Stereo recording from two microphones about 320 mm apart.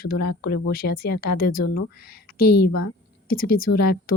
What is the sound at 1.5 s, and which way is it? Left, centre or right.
Speech, left.